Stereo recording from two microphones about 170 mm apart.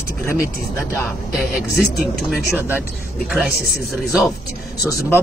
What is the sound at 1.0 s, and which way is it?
A man's voice, centre (ahead or behind).